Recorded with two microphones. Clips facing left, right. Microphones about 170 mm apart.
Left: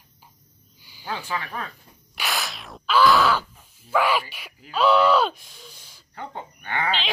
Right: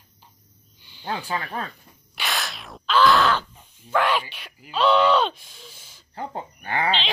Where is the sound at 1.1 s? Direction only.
35° right (ahead or behind).